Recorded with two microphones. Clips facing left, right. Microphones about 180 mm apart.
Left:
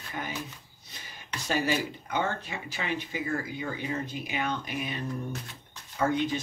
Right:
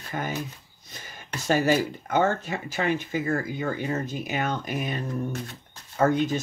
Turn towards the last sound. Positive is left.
turn(degrees=-45)  # may be behind; listen again after turning